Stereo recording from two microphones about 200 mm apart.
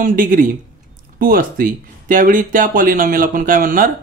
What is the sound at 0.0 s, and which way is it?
A man's voice, 45° right (ahead or behind).